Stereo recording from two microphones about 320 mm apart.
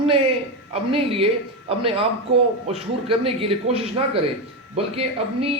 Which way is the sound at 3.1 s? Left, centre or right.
Centre.